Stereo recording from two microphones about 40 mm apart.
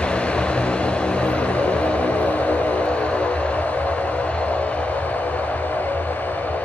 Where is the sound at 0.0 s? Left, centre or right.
Left.